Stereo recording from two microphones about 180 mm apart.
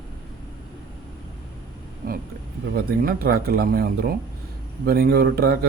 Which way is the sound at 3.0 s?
55° right (ahead or behind).